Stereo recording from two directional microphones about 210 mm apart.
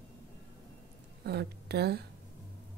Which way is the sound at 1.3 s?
50° right (ahead or behind).